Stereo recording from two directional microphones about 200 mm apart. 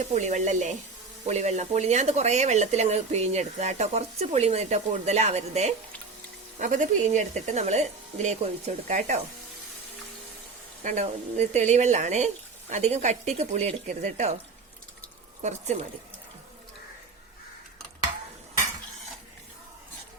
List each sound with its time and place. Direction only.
0.0 s speech: 35° right (ahead or behind)
10.8 s speech: 35° right (ahead or behind)
15.4 s speech: 35° right (ahead or behind)